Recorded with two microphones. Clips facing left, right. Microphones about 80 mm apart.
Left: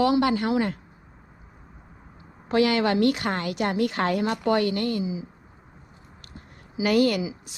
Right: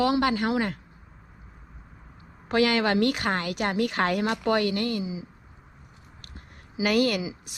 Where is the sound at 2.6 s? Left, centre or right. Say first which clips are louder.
Left 1 dB; right.